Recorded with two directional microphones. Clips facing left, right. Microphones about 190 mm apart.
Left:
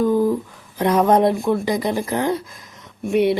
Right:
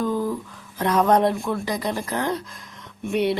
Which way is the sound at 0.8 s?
15° left (ahead or behind).